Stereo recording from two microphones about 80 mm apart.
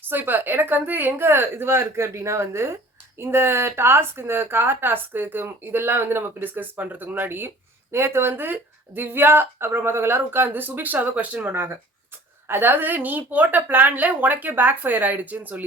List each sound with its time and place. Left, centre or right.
0.1 s speech: right